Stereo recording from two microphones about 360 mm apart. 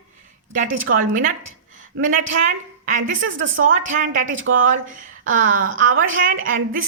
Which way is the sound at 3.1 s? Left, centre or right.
Right.